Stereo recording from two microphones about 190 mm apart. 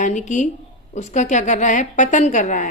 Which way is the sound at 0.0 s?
40° left (ahead or behind).